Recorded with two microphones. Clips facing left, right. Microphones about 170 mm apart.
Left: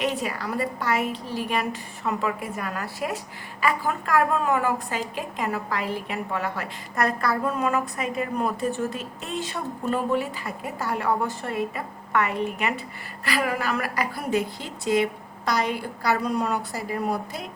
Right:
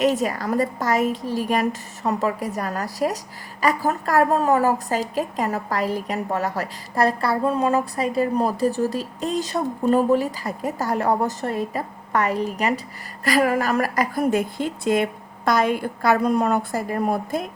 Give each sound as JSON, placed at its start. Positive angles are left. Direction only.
{"t": 0.0, "sound": "a woman's voice", "side_deg": -45}